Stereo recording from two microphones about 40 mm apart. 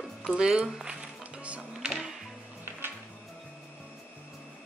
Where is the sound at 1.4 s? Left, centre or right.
Right.